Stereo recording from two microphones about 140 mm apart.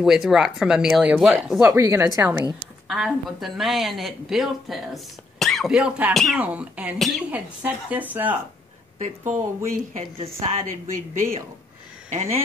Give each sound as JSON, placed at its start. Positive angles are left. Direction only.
{"t": 0.0, "sound": "speech", "side_deg": -5}
{"t": 1.7, "sound": "speech", "side_deg": -20}
{"t": 2.9, "sound": "a woman's voice", "side_deg": 0}
{"t": 7.2, "sound": "a woman's voice", "side_deg": -10}
{"t": 8.9, "sound": "a woman's voice", "side_deg": -60}